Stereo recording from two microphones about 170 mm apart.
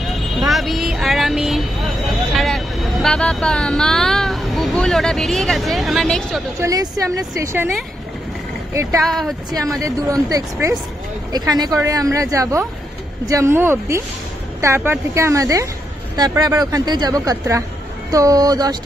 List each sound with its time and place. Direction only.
0.4 s vehicle: centre (ahead or behind)
6.6 s speech: 20° right (ahead or behind)
9.0 s speech: centre (ahead or behind)
9.5 s a woman's voice: 20° right (ahead or behind)